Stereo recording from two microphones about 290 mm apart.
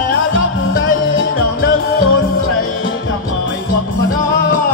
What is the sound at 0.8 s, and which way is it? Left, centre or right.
Music, left.